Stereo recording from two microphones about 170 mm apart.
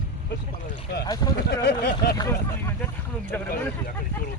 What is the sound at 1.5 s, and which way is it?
Speech, 75° left (ahead or behind).